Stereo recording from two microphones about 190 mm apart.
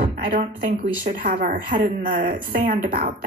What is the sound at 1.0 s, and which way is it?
A woman's voice, 45° right (ahead or behind).